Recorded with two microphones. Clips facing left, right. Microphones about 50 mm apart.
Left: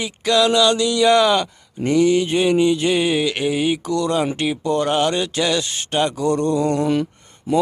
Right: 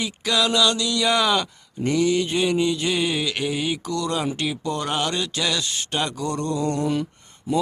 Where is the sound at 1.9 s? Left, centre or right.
Left.